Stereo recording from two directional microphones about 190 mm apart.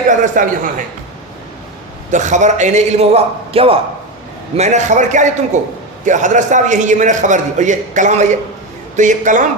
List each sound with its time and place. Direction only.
0.1 s a man's voice: 45° right (ahead or behind)
2.0 s a man's voice: 40° right (ahead or behind)